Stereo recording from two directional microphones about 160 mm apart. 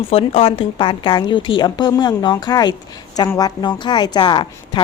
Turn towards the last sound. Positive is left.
turn(degrees=30)  # may be behind; listen again after turning